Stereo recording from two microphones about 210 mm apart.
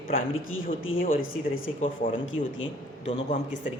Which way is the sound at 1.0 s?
40° left (ahead or behind).